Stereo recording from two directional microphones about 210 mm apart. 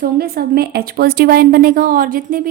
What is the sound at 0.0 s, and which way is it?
A woman's voice, 45° right (ahead or behind).